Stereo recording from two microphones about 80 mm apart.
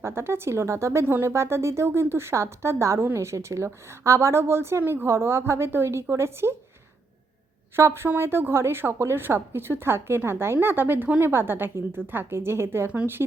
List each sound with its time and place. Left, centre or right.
0.0 s a woman's voice: right
7.8 s a woman's voice: right